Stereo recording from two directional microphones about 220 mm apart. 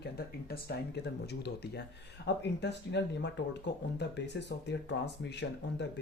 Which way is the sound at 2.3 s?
50° left (ahead or behind).